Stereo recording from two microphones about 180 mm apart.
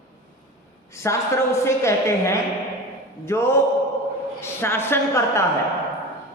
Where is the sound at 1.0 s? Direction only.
15° left (ahead or behind).